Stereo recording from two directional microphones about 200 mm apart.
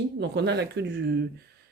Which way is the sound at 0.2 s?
60° right (ahead or behind).